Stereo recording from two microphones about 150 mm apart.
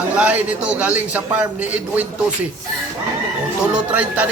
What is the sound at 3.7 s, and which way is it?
Speech, 10° right (ahead or behind).